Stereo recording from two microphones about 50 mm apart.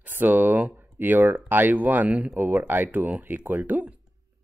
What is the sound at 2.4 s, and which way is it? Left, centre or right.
Speech, right.